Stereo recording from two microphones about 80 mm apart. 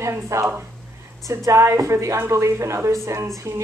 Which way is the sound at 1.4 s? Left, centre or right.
Right.